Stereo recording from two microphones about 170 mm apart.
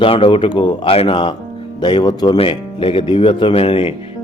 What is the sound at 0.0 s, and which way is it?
A man's voice, 30° left (ahead or behind).